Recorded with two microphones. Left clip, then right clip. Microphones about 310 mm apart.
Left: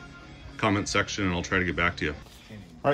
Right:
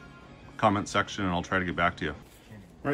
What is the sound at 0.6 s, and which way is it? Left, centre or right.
Speech, centre.